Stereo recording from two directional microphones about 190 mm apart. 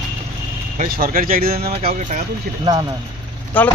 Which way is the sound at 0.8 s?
50° right (ahead or behind).